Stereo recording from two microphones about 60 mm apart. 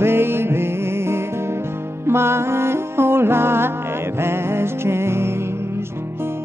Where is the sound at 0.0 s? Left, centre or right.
Right.